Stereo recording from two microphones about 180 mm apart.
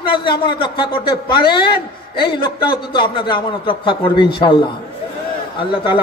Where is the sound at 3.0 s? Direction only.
25° left (ahead or behind).